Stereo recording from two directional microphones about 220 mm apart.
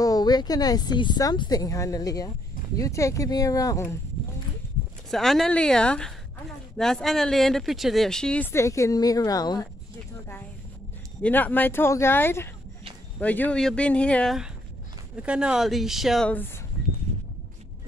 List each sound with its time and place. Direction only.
0.0 s speech: 15° left (ahead or behind)
5.1 s speech: centre (ahead or behind); by 9.6 s 15° left (ahead or behind)
11.2 s speech: 10° left (ahead or behind)